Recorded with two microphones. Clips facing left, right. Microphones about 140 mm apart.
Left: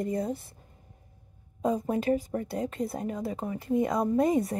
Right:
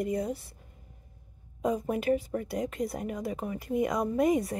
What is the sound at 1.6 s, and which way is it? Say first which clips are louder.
A woman's voice: left 1 dB; 25° left (ahead or behind).